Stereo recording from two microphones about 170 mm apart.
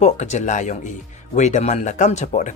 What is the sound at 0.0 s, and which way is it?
A man's voice, 45° left (ahead or behind).